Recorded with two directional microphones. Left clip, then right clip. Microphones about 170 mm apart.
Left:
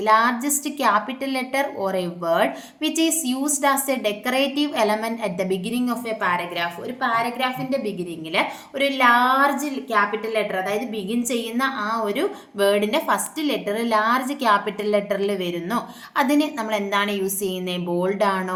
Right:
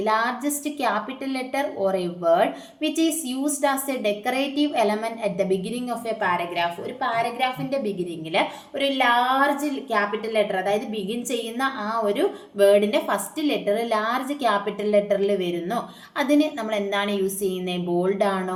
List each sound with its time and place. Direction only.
0.0 s a woman's voice: 30° left (ahead or behind)